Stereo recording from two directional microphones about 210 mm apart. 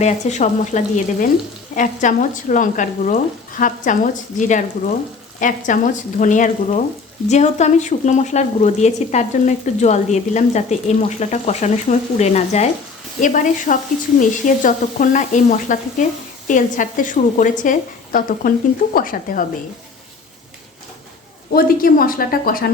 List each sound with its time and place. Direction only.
0.0 s speech: 35° left (ahead or behind)
21.5 s a woman's voice: 45° left (ahead or behind)